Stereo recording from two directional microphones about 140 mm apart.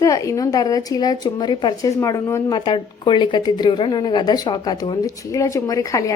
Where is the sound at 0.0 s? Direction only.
25° left (ahead or behind).